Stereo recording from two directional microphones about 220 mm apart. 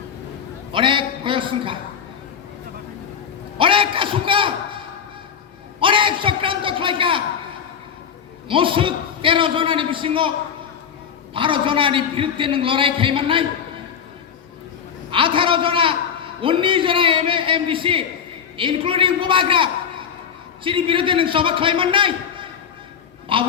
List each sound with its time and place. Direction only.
0.7 s a man's voice: 25° right (ahead or behind)
3.6 s a sound: 25° right (ahead or behind)
5.8 s a sound: 25° right (ahead or behind)
8.4 s a man's voice: 25° right (ahead or behind)
11.3 s a man's voice: 25° right (ahead or behind)
15.1 s a man's voice: 25° right (ahead or behind)